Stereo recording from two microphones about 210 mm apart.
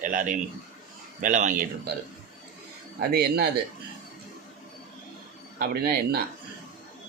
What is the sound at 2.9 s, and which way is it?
Speech, 45° right (ahead or behind).